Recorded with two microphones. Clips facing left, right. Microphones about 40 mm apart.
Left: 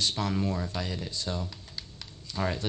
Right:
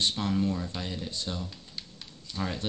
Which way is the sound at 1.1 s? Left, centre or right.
Right.